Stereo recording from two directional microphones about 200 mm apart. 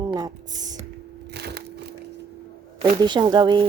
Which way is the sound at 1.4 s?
55° right (ahead or behind).